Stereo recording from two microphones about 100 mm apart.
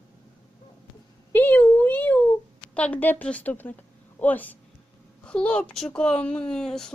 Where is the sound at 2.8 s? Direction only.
15° left (ahead or behind).